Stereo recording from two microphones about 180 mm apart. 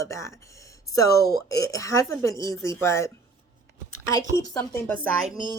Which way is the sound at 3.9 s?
20° left (ahead or behind).